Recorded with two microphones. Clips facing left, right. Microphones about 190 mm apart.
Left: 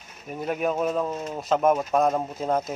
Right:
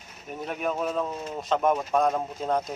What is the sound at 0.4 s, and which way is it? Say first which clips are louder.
Speech: left 4 dB; 5° left (ahead or behind).